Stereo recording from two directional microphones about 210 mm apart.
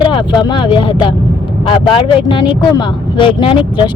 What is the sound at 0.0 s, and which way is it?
Speech, 25° left (ahead or behind).